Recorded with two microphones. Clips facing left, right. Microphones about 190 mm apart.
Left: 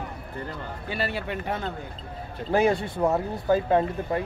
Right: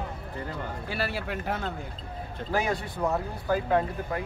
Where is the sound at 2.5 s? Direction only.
25° left (ahead or behind).